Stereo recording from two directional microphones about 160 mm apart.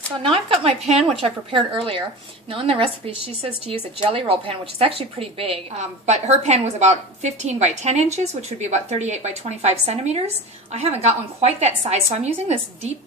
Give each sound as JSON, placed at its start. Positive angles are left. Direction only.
{"t": 0.2, "sound": "a woman's voice", "side_deg": -35}